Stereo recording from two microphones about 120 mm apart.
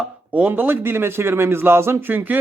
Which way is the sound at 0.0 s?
10° right (ahead or behind).